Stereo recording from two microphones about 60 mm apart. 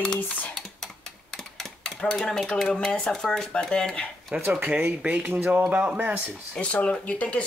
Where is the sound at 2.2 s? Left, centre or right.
Centre.